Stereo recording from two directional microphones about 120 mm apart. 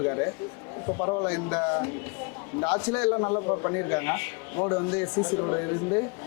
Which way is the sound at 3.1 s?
30° left (ahead or behind).